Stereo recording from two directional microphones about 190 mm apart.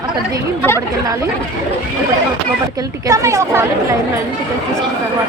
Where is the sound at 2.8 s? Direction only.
15° right (ahead or behind).